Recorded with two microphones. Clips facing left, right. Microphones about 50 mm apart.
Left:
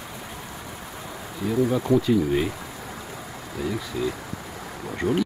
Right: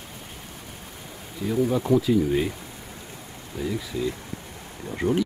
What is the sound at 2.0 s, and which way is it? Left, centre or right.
Speech, centre.